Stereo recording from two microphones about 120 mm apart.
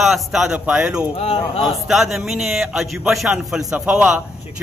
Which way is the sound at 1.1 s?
60° left (ahead or behind).